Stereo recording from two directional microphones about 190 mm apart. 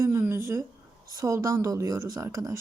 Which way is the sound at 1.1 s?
15° right (ahead or behind).